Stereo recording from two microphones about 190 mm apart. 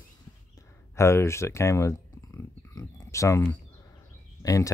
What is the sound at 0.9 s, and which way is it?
Speech, 15° left (ahead or behind).